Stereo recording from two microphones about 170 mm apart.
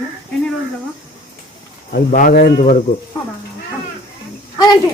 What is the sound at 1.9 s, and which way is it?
Speech, 55° left (ahead or behind).